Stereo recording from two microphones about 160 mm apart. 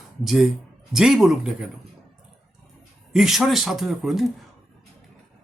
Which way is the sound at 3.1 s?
Centre (ahead or behind).